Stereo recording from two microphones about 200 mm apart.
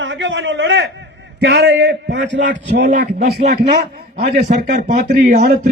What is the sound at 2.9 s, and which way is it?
A man's voice, 40° right (ahead or behind).